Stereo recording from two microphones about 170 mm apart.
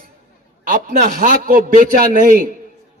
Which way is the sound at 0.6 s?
55° right (ahead or behind).